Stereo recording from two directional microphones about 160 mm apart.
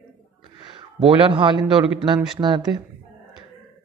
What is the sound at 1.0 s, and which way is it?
A man's voice, 30° right (ahead or behind).